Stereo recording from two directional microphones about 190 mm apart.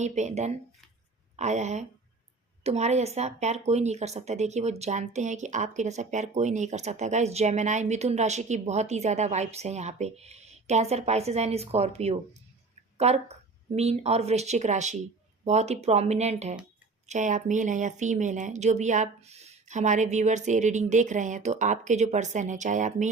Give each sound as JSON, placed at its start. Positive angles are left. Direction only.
{"t": 0.0, "sound": "speech", "side_deg": -40}